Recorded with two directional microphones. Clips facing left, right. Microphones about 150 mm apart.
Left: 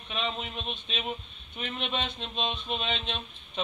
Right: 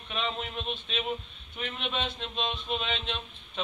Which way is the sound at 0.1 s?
20° left (ahead or behind).